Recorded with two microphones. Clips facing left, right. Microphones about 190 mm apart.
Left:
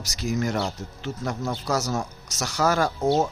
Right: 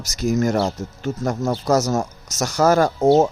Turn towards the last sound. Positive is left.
turn(degrees=-50)  # may be behind; listen again after turning